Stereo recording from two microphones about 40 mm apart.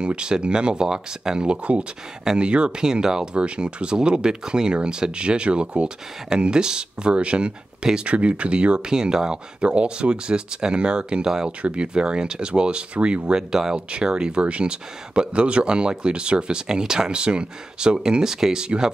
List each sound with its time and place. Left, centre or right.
0.0 s speech: right
3.3 s speech: right
11.6 s speech: right
13.3 s speech: centre
13.7 s speech: right
18.2 s speech: centre